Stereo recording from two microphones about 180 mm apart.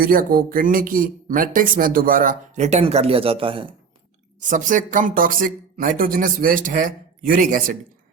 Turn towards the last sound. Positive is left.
turn(degrees=-45)  # may be behind; listen again after turning